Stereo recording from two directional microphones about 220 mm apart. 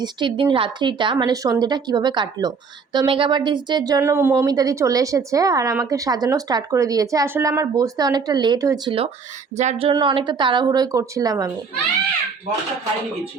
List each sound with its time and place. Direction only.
0.0 s a woman's voice: 20° right (ahead or behind)